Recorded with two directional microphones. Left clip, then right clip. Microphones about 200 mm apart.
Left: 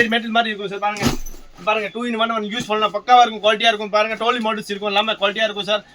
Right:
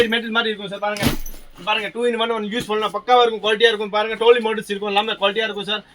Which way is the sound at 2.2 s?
15° left (ahead or behind).